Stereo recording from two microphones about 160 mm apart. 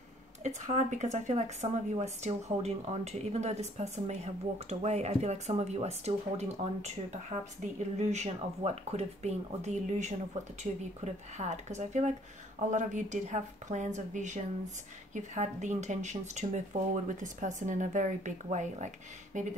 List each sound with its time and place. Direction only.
0.4 s speech: 50° right (ahead or behind)
11.3 s speech: 45° right (ahead or behind)